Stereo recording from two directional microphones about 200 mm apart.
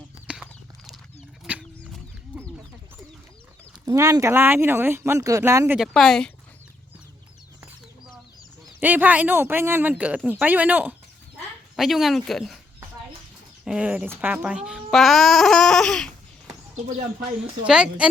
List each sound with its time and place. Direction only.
0.3 s horse: 5° right (ahead or behind)
1.5 s chicken: 5° right (ahead or behind)
3.7 s speech: 15° right (ahead or behind); by 6.3 s 5° left (ahead or behind)
7.6 s chicken: centre (ahead or behind)
8.8 s speech: 10° right (ahead or behind)
13.7 s speech: 5° right (ahead or behind)
16.7 s speech: 35° right (ahead or behind)
17.7 s speech: 5° right (ahead or behind)